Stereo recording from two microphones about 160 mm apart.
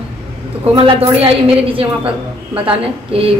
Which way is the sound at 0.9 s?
35° right (ahead or behind).